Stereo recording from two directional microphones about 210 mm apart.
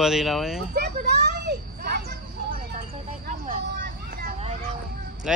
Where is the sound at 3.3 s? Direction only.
40° right (ahead or behind).